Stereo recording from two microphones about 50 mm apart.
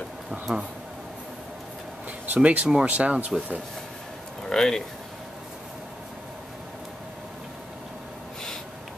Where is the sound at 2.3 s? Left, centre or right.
Right.